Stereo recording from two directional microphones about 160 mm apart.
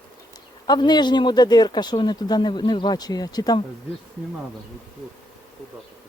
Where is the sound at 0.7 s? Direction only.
25° left (ahead or behind).